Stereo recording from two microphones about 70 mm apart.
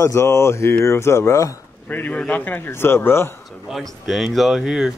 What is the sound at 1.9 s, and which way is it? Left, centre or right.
A man's voice, left.